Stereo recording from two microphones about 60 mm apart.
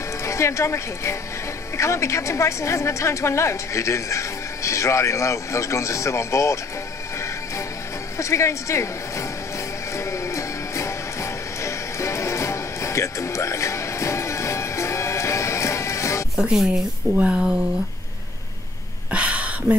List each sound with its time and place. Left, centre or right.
0.2 s a woman's voice: left
8.2 s speech: left
9.9 s music: left
16.3 s a sound: centre
17.1 s a woman's voice: left
19.0 s a sound: right